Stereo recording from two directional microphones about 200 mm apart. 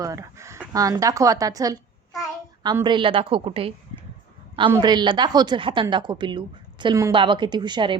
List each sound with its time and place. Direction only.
0.0 s a woman's voice: 15° right (ahead or behind)